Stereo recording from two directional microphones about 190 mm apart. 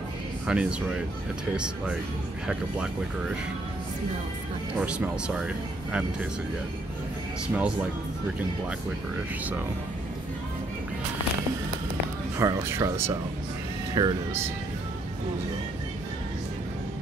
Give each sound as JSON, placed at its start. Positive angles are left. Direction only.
{"t": 0.5, "sound": "speech", "side_deg": -5}
{"t": 4.7, "sound": "speech", "side_deg": -5}
{"t": 7.5, "sound": "speech", "side_deg": -5}
{"t": 12.4, "sound": "speech", "side_deg": -15}